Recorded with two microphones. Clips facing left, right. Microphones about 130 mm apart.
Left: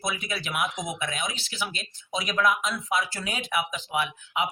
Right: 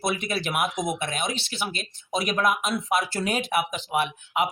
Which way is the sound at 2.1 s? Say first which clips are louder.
Right 1 dB; 55° right (ahead or behind).